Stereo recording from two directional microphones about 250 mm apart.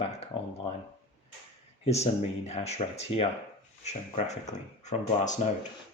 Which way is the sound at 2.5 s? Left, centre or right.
Left.